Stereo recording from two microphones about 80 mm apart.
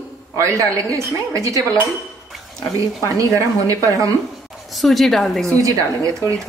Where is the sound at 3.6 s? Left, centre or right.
Right.